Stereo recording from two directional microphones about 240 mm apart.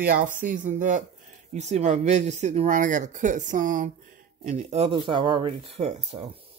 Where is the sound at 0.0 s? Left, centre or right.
Right.